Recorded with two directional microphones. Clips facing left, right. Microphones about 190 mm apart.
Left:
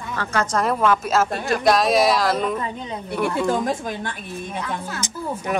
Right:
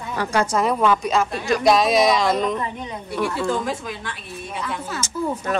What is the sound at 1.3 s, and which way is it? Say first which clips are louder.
Speech: right 1 dB; 50° left (ahead or behind).